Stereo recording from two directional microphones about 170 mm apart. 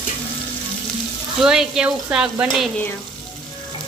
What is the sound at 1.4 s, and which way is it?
Speech, 5° right (ahead or behind).